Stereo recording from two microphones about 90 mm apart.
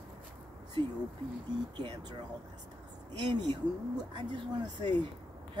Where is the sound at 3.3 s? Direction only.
55° right (ahead or behind).